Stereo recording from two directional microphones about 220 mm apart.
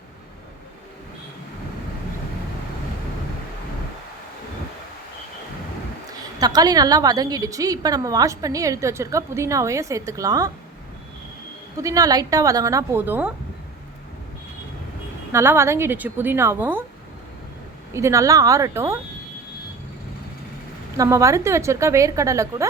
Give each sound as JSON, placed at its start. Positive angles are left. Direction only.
{"t": 6.4, "sound": "a woman's voice", "side_deg": -15}
{"t": 11.8, "sound": "a woman's voice", "side_deg": -15}
{"t": 15.3, "sound": "a woman's voice", "side_deg": -10}
{"t": 17.9, "sound": "a woman's voice", "side_deg": -15}
{"t": 20.9, "sound": "a woman's voice", "side_deg": -15}